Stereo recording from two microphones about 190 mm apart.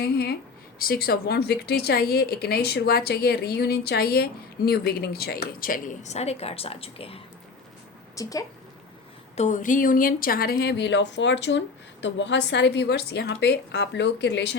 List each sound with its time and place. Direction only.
0.0 s speech: 60° left (ahead or behind); by 7.2 s 30° left (ahead or behind)
8.1 s a woman's voice: 20° left (ahead or behind)
9.3 s speech: 40° left (ahead or behind); by 14.5 s 65° left (ahead or behind)